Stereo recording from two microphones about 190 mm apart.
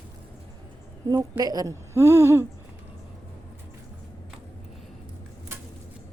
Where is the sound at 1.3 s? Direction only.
20° right (ahead or behind).